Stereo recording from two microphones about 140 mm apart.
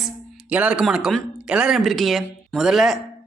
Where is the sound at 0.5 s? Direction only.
10° right (ahead or behind).